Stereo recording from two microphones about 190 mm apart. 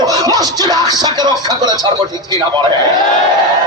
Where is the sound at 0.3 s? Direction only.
20° right (ahead or behind).